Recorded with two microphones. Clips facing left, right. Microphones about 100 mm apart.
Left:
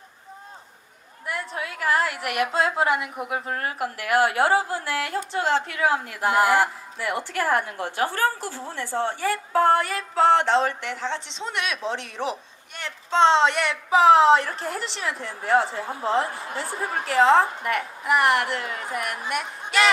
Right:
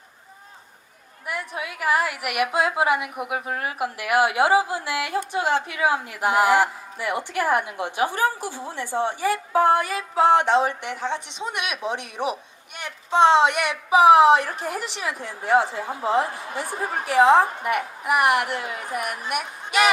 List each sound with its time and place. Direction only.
1.3 s a woman's voice: 15° right (ahead or behind)